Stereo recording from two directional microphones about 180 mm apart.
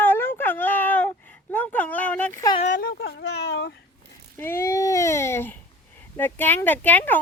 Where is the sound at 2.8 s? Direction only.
65° left (ahead or behind).